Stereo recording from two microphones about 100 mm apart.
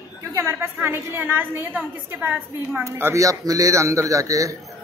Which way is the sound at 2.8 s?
25° right (ahead or behind).